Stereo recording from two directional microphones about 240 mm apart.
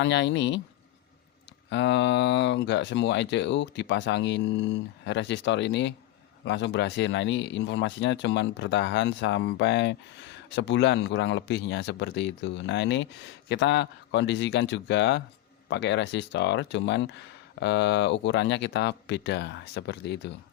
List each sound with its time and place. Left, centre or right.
0.0 s speech: left
1.7 s speech: left